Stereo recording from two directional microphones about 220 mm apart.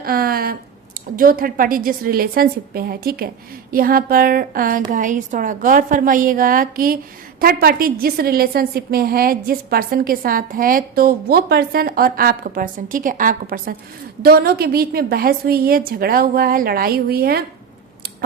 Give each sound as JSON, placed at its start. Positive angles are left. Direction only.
{"t": 0.0, "sound": "a woman's voice", "side_deg": -40}